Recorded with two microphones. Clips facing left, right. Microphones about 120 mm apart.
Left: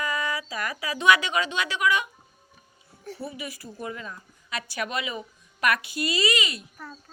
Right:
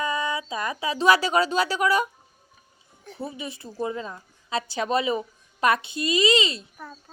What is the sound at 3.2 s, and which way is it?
A woman's voice, 25° right (ahead or behind).